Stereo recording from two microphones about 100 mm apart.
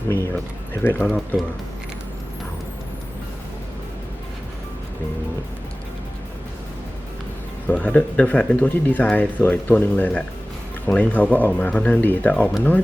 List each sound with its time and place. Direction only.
0.1 s speech: 20° left (ahead or behind)
7.7 s speech: 15° left (ahead or behind)